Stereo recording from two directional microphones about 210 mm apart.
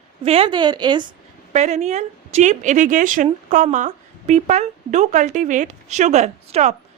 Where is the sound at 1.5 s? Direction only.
30° right (ahead or behind).